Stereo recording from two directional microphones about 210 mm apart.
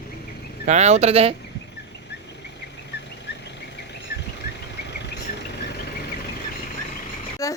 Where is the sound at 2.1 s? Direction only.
55° left (ahead or behind).